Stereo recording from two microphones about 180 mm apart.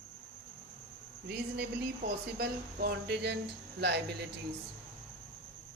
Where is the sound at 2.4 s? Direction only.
60° right (ahead or behind).